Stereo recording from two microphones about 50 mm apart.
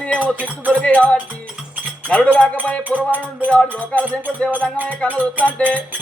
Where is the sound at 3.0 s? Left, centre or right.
Right.